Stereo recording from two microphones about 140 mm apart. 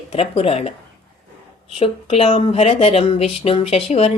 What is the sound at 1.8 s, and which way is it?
Speech, 45° left (ahead or behind).